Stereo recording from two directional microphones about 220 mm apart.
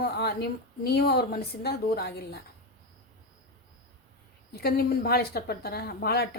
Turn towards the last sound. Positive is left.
turn(degrees=45)  # may be behind; listen again after turning